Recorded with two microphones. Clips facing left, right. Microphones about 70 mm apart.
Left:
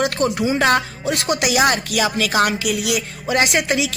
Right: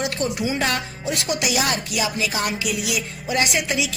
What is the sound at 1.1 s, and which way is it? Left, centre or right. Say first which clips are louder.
A woman's voice: left 4 dB; left.